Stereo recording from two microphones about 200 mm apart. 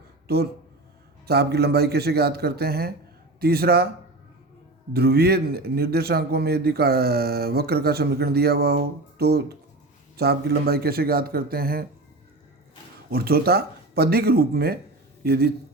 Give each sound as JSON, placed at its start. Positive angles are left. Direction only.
{"t": 0.3, "sound": "speech", "side_deg": -50}
{"t": 4.9, "sound": "speech", "side_deg": -50}
{"t": 13.1, "sound": "speech", "side_deg": -50}